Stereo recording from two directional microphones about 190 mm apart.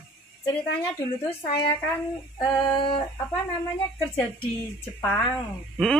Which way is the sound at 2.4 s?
25° left (ahead or behind).